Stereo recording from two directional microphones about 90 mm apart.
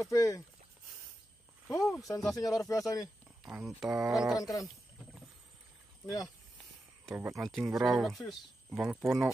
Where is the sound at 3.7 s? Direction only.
10° right (ahead or behind).